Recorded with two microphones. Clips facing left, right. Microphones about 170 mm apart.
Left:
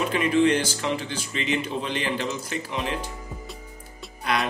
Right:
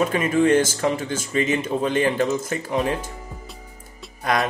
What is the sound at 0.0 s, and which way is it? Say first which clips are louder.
Speech: right 2 dB; 45° right (ahead or behind).